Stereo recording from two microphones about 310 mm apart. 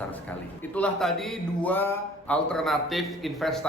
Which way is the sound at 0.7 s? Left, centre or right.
Centre.